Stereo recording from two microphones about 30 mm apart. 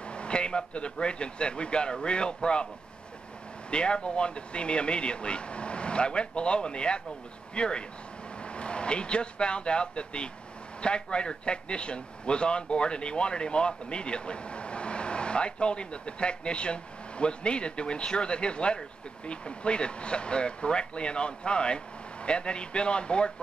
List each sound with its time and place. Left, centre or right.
0.0 s a man's voice: left
3.7 s a man's voice: left